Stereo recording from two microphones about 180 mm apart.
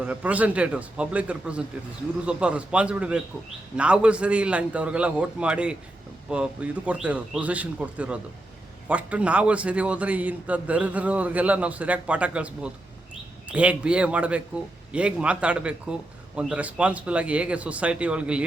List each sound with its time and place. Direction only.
0.0 s a man's voice: 10° right (ahead or behind)